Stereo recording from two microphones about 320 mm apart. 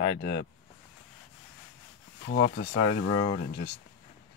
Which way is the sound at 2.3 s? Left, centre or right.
Left.